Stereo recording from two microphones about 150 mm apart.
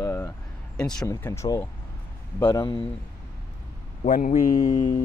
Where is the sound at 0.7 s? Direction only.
5° left (ahead or behind).